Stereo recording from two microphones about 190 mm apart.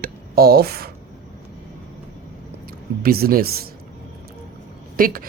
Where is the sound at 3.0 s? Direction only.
50° right (ahead or behind).